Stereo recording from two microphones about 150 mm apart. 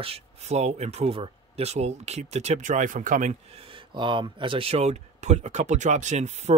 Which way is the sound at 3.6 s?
35° right (ahead or behind).